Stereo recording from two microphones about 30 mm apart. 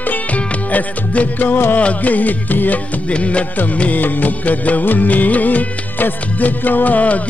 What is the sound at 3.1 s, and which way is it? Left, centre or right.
Music, left.